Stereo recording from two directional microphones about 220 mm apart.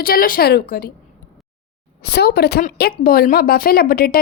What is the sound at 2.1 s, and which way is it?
A woman's voice, 45° left (ahead or behind).